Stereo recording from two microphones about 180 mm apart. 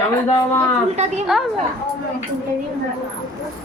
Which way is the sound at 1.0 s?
40° right (ahead or behind).